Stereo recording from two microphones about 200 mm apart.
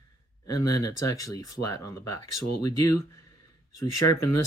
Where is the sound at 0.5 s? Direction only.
20° left (ahead or behind).